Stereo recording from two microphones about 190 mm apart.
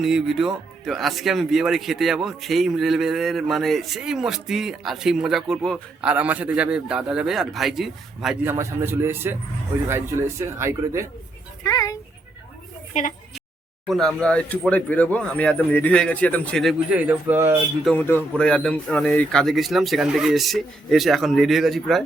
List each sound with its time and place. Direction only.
0.0 s speech: centre (ahead or behind)
8.4 s speech: 10° right (ahead or behind)
11.6 s speech: 20° left (ahead or behind)
12.9 s speech: 40° left (ahead or behind)
13.8 s speech: centre (ahead or behind)
17.8 s speech: 10° left (ahead or behind)